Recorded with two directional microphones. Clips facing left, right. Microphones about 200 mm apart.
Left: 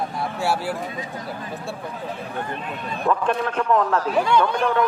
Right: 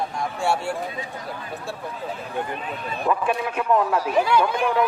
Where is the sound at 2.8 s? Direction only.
5° right (ahead or behind).